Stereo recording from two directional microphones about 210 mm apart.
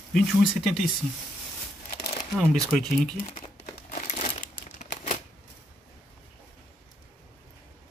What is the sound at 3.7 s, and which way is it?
Crumpling, 40° left (ahead or behind).